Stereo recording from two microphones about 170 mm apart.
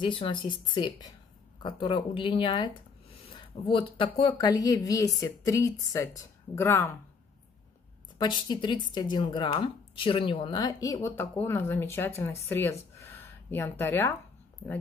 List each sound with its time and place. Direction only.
0.0 s speech: 30° left (ahead or behind)
8.2 s speech: 25° left (ahead or behind)
13.0 s a sound: 15° left (ahead or behind)